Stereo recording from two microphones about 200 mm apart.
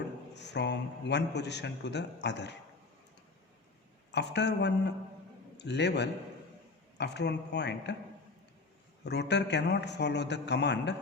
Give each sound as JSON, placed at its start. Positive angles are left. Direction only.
{"t": 0.3, "sound": "a man's voice", "side_deg": 60}
{"t": 4.1, "sound": "a man's voice", "side_deg": 60}
{"t": 9.0, "sound": "a man's voice", "side_deg": 60}